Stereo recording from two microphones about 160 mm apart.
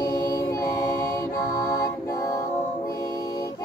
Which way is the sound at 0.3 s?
20° left (ahead or behind).